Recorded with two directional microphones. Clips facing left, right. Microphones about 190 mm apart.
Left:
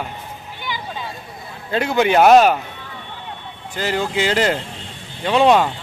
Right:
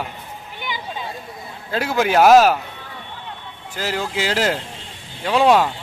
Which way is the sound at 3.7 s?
5° right (ahead or behind).